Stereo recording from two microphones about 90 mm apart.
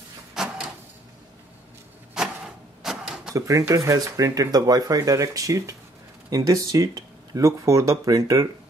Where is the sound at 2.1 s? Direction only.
5° right (ahead or behind).